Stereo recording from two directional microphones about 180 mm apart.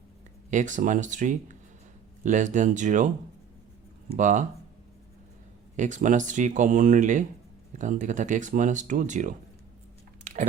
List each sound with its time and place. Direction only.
0.5 s speech: 45° right (ahead or behind)
4.2 s speech: 45° right (ahead or behind)
5.7 s speech: 45° right (ahead or behind)
10.3 s chewing: 40° right (ahead or behind)